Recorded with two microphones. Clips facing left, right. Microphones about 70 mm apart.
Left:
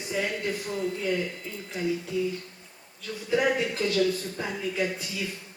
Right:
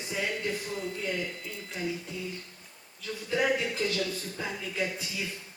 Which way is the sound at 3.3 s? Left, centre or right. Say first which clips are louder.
Left 3 dB; left.